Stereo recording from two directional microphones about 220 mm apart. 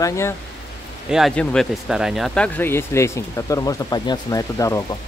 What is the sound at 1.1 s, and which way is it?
Speech, centre (ahead or behind).